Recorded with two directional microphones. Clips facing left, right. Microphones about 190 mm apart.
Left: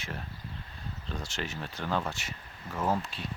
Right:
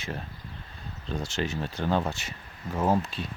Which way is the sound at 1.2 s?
25° right (ahead or behind).